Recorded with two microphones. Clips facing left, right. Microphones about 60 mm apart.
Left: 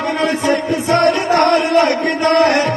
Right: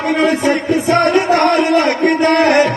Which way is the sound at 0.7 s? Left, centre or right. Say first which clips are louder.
Right 3 dB; right.